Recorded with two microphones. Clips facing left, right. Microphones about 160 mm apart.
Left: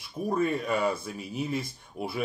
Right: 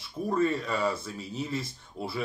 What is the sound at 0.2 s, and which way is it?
Speech, 15° left (ahead or behind).